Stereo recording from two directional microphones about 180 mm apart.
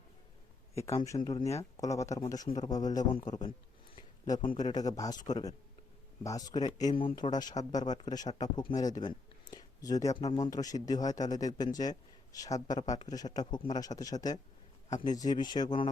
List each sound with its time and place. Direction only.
0.9 s speech: 15° left (ahead or behind)
3.9 s a sound: 25° left (ahead or behind)
4.6 s speech: 20° left (ahead or behind)
14.8 s speech: 40° left (ahead or behind)
15.1 s speech: 20° left (ahead or behind)